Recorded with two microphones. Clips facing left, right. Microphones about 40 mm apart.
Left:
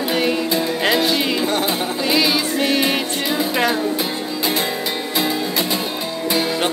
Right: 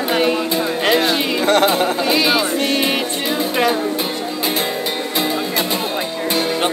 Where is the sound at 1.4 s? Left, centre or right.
Right.